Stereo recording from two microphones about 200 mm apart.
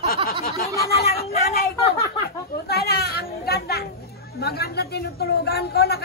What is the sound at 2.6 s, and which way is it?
A woman's voice, 50° left (ahead or behind).